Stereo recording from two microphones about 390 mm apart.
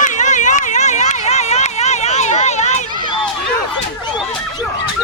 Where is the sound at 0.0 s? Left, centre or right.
Centre.